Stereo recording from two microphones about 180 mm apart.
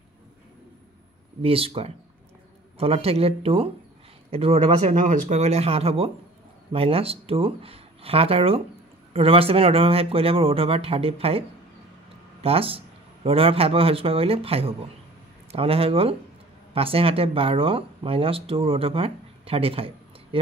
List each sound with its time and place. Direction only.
1.4 s speech: 30° right (ahead or behind)
12.4 s speech: 30° right (ahead or behind)